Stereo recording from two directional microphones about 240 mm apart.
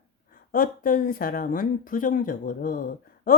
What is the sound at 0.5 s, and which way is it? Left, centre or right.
Speech, left.